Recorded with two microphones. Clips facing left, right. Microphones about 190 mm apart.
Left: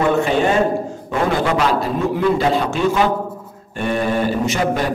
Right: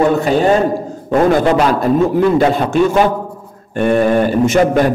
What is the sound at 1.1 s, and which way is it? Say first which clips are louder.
A man's voice: right 7 dB; 45° right (ahead or behind).